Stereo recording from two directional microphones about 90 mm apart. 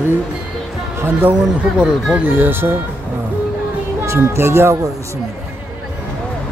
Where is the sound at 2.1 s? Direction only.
25° right (ahead or behind).